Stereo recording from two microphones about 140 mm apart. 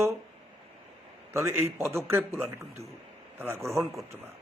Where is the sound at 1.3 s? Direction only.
20° right (ahead or behind).